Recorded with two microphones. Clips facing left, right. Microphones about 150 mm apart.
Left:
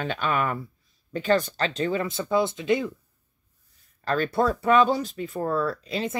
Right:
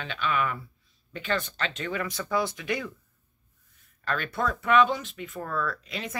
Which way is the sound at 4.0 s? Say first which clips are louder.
Left 6 dB; 35° left (ahead or behind).